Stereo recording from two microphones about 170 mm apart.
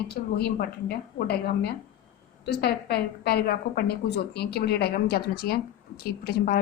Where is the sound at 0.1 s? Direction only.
65° left (ahead or behind).